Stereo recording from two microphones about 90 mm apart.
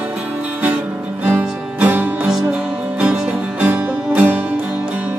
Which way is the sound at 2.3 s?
5° right (ahead or behind).